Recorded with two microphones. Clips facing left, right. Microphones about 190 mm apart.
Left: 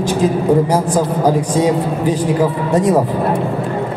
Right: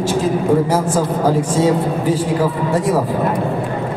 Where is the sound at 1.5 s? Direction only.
15° left (ahead or behind).